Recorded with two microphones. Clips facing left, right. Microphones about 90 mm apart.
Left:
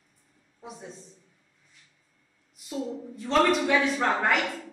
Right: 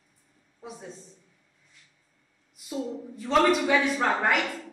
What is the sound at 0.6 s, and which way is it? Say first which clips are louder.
Speech: right 1 dB; centre (ahead or behind).